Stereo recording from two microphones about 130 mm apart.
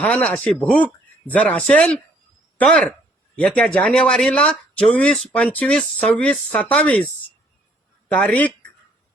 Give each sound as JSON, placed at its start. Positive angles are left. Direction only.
{"t": 0.0, "sound": "speech", "side_deg": 10}
{"t": 8.2, "sound": "speech", "side_deg": 10}